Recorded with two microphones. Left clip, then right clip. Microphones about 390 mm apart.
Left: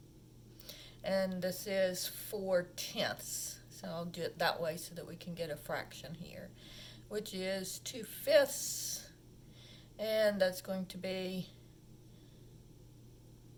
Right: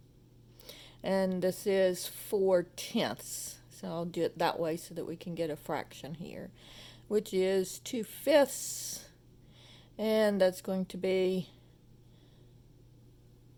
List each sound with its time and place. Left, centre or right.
0.6 s speech: centre